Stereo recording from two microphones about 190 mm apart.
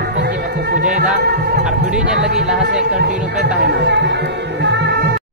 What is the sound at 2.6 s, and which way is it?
Speech, 65° right (ahead or behind).